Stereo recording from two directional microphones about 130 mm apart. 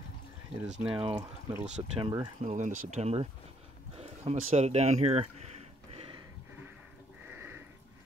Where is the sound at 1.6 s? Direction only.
55° right (ahead or behind).